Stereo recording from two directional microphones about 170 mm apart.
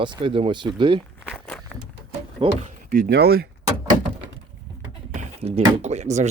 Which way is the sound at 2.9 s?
70° right (ahead or behind).